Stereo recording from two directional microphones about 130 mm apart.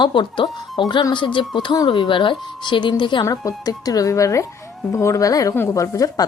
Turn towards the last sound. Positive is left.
turn(degrees=25)  # may be behind; listen again after turning